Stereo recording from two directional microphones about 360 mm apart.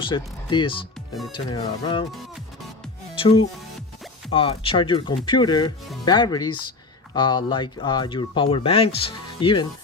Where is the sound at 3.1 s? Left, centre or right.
Centre.